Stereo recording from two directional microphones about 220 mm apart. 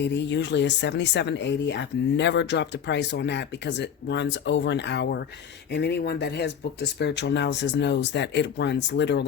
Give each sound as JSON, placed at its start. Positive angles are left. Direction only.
{"t": 0.0, "sound": "speech", "side_deg": 50}